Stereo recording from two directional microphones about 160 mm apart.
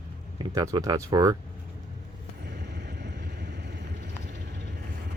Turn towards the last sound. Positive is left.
turn(degrees=-90)